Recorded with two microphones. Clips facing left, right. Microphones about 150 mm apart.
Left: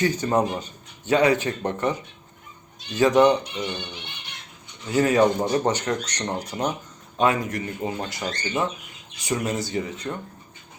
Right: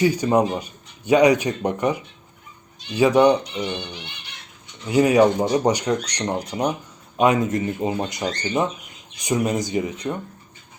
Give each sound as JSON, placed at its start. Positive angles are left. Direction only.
{"t": 0.0, "sound": "a man's voice", "side_deg": -10}
{"t": 4.9, "sound": "a man's voice", "side_deg": -15}